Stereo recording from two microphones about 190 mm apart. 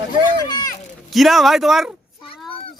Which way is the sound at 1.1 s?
Centre (ahead or behind).